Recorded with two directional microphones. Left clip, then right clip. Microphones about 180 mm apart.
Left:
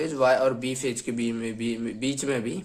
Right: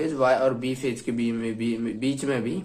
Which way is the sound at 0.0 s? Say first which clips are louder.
Even; 25° left (ahead or behind).